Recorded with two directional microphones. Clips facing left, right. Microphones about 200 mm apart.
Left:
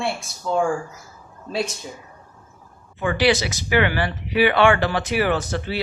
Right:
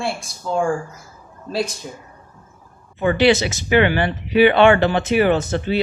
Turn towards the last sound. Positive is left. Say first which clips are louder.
# right 5 dB
turn(degrees=-25)  # may be behind; listen again after turning